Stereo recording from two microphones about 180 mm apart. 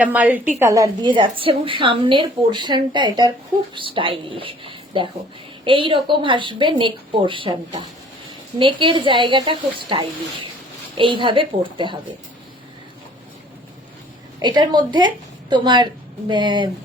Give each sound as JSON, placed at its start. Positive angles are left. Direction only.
{"t": 0.0, "sound": "a woman's voice", "side_deg": -10}
{"t": 14.3, "sound": "a woman's voice", "side_deg": -25}